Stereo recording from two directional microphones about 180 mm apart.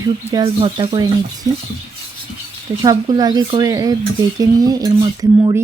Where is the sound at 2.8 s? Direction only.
20° right (ahead or behind).